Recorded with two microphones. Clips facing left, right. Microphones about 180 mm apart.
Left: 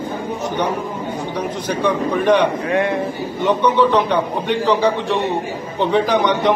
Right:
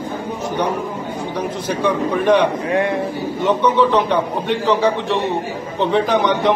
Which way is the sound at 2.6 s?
25° right (ahead or behind).